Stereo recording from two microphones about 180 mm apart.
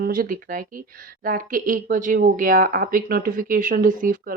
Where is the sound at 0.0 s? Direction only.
50° right (ahead or behind).